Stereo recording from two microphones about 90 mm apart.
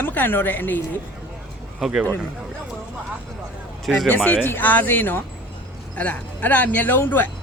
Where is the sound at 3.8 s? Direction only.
Centre (ahead or behind).